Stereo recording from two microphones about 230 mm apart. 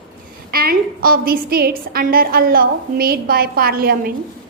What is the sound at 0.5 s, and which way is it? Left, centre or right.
A woman's voice, right.